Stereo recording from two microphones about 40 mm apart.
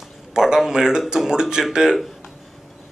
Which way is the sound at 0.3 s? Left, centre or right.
Centre.